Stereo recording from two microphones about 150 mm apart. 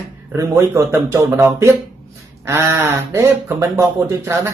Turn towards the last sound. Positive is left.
turn(degrees=-15)  # may be behind; listen again after turning